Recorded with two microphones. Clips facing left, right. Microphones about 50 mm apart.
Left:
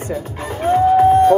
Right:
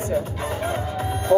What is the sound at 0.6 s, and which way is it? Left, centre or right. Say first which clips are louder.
Music: left 19 dB; left.